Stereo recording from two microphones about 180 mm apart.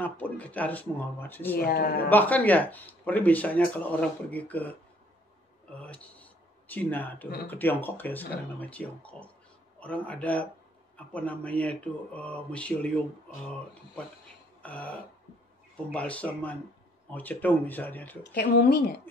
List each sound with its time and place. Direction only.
0.0 s speech: 10° left (ahead or behind)
1.6 s speech: 60° left (ahead or behind)
2.0 s speech: 10° left (ahead or behind)
14.6 s a sound: 10° left (ahead or behind)
15.9 s speech: 5° left (ahead or behind)
18.3 s speech: 60° left (ahead or behind)